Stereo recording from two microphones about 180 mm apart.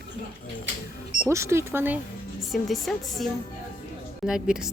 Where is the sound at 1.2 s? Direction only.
15° right (ahead or behind).